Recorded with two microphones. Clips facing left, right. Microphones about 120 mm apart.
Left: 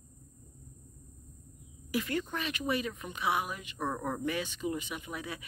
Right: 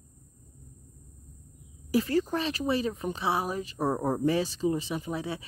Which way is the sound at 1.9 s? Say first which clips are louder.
Right 7 dB; 35° right (ahead or behind).